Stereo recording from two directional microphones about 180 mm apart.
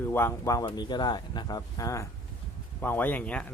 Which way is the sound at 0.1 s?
15° left (ahead or behind).